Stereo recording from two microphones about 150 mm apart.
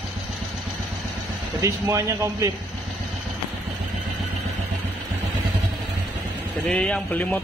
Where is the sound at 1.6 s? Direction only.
20° right (ahead or behind).